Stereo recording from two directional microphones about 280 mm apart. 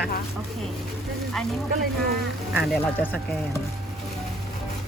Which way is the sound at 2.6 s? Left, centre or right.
Centre.